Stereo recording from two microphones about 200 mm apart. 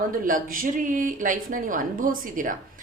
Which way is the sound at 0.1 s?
45° right (ahead or behind).